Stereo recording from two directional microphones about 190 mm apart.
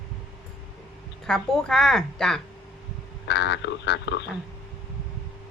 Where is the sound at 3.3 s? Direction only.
65° left (ahead or behind).